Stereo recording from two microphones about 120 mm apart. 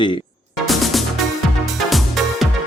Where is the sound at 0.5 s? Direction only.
Centre (ahead or behind).